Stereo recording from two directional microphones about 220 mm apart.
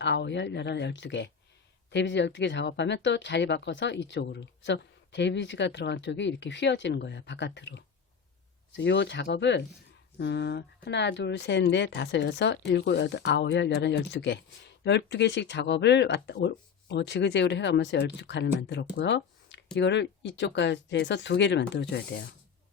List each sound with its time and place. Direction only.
0.0 s speech: 50° left (ahead or behind)